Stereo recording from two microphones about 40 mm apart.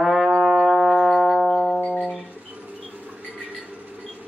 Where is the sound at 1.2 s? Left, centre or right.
Left.